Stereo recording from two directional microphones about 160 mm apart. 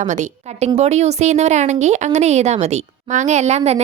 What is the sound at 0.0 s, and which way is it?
A woman's voice, 50° right (ahead or behind).